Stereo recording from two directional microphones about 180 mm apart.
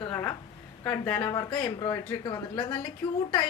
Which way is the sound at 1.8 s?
20° left (ahead or behind).